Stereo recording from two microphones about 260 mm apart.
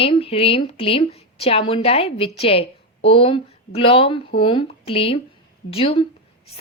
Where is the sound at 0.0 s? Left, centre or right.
Left.